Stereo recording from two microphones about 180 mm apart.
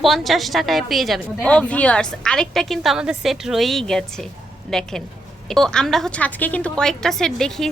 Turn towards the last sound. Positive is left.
turn(degrees=5)  # may be behind; listen again after turning